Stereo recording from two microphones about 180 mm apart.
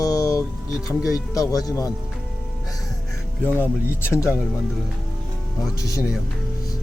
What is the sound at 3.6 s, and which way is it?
Speech, 10° left (ahead or behind).